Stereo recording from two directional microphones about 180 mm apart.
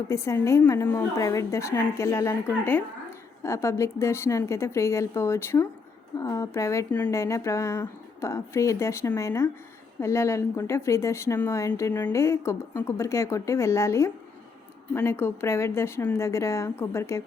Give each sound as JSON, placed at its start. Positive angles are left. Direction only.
{"t": 0.1, "sound": "a woman's voice", "side_deg": 15}